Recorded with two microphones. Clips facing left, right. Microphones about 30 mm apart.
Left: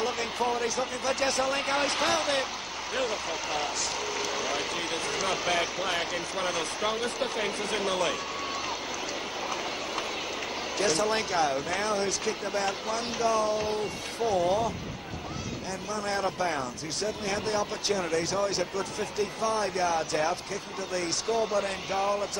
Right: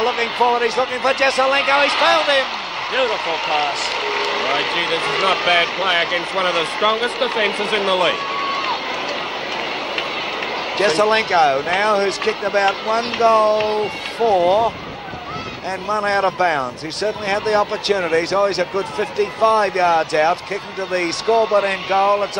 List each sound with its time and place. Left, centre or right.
0.0 s speech: right
10.8 s speech: right
15.9 s speech: right